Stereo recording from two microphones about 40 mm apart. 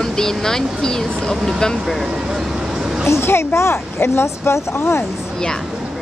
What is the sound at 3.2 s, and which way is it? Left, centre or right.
Speech, left.